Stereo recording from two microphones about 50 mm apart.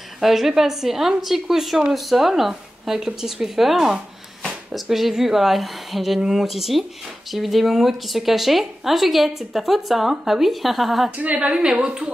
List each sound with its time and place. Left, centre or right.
0.2 s speech: centre
11.1 s a woman's voice: right